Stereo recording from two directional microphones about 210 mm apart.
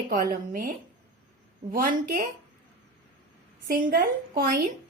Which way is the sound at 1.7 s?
40° right (ahead or behind).